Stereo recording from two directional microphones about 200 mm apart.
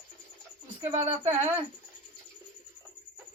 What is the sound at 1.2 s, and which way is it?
Speech, 10° right (ahead or behind).